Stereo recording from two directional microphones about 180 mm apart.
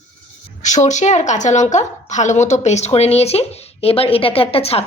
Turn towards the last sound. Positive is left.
turn(degrees=35)  # may be behind; listen again after turning